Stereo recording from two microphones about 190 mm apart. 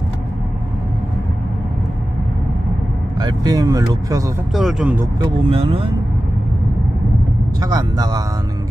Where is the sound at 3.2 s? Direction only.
20° right (ahead or behind).